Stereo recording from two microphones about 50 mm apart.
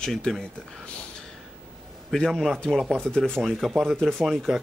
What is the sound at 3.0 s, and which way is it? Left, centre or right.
Speech, centre.